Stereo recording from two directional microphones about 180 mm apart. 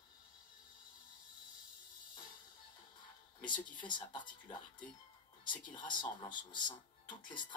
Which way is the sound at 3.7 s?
25° left (ahead or behind).